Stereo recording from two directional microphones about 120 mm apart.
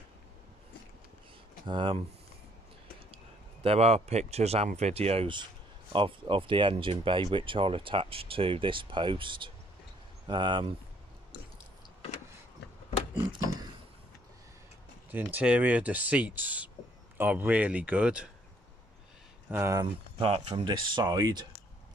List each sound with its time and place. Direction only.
1.7 s speech: 45° right (ahead or behind)
3.6 s speech: 60° right (ahead or behind); by 10.7 s 45° right (ahead or behind)
15.0 s speech: 15° right (ahead or behind)
19.5 s speech: 15° right (ahead or behind)
20.2 s speech: 45° right (ahead or behind)